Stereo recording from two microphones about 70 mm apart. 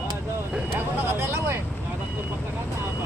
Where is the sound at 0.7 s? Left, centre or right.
Right.